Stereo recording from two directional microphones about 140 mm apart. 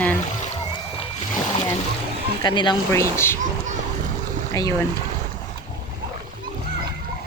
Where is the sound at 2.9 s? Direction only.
20° left (ahead or behind).